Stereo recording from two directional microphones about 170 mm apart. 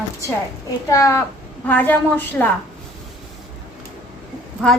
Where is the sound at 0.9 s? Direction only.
20° left (ahead or behind).